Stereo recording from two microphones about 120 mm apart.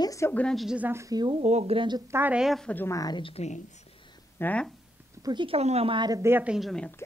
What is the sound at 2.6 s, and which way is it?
Speech, 15° left (ahead or behind).